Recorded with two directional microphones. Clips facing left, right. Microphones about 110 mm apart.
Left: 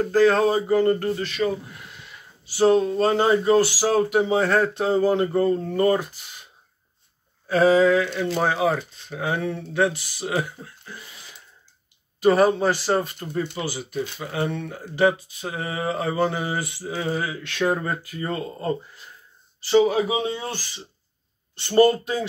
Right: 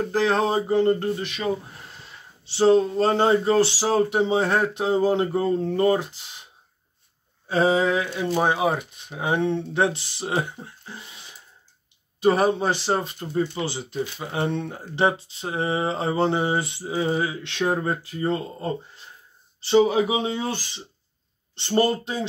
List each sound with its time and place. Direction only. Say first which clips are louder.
0.1 s speech: left 4 dB; 20° right (ahead or behind)
1.7 s speech: left 1 dB; 35° right (ahead or behind)
7.4 s speech: left 3 dB; 20° right (ahead or behind)
12.2 s speech: left 2 dB; 20° right (ahead or behind)